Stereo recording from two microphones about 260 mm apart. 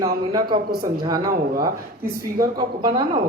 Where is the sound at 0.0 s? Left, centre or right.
Centre.